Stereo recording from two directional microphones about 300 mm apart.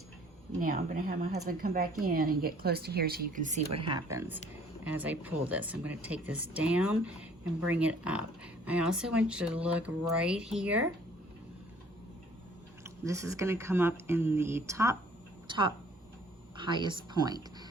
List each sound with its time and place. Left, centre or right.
0.6 s speech: right; by 10.8 s centre
12.8 s speech: centre